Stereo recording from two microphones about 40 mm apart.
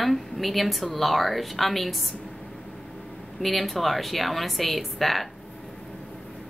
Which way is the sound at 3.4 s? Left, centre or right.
Centre.